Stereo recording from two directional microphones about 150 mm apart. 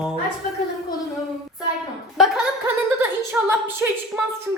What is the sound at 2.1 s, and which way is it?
Chuckle, centre (ahead or behind).